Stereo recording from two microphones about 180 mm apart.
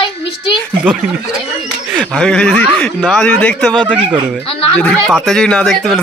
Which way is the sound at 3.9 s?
30° right (ahead or behind).